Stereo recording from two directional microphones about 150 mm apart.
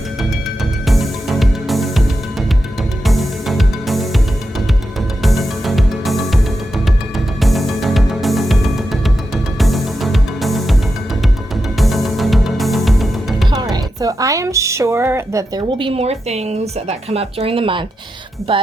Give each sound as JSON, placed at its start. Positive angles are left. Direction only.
{"t": 0.2, "sound": "music", "side_deg": 0}
{"t": 5.2, "sound": "music", "side_deg": 0}
{"t": 11.8, "sound": "music", "side_deg": 0}
{"t": 13.5, "sound": "music", "side_deg": -25}
{"t": 15.8, "sound": "speech", "side_deg": -40}